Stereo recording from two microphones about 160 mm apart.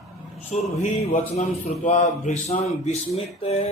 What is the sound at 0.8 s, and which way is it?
A man's voice, 45° left (ahead or behind).